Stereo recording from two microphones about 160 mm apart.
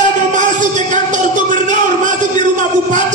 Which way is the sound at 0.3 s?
50° right (ahead or behind).